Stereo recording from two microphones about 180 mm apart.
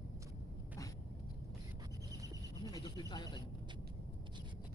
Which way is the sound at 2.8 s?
20° left (ahead or behind).